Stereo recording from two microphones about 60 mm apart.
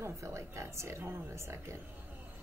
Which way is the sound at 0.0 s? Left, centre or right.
Right.